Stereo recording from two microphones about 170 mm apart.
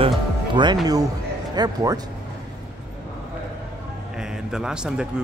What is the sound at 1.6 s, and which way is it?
Speech, 25° right (ahead or behind).